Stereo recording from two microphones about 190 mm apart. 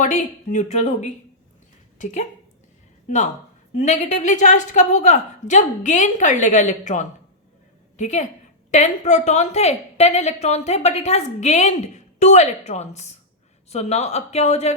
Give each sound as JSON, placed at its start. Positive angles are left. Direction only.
{"t": 0.0, "sound": "a woman's voice", "side_deg": 40}